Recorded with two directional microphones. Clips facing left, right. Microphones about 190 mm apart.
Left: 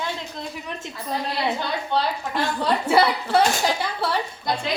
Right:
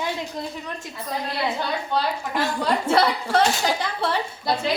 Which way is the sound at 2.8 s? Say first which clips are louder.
Left 2 dB; 5° left (ahead or behind).